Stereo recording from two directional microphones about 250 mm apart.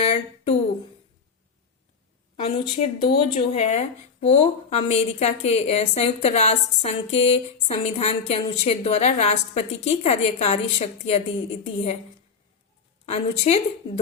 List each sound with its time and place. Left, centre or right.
0.0 s a sound: left
2.3 s a woman's voice: left
13.1 s a woman's voice: left